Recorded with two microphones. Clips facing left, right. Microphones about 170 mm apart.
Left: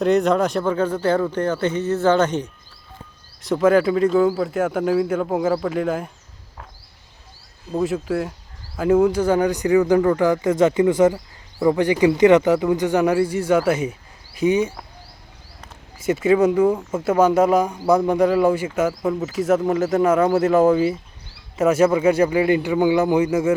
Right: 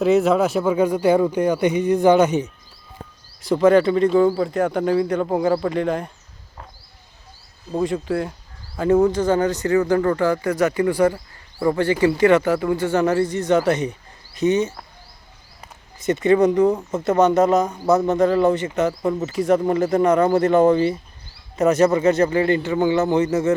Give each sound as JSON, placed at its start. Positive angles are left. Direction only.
{"t": 0.0, "sound": "speech", "side_deg": -5}
{"t": 3.4, "sound": "speech", "side_deg": 5}
{"t": 7.8, "sound": "speech", "side_deg": 5}
{"t": 16.0, "sound": "speech", "side_deg": 5}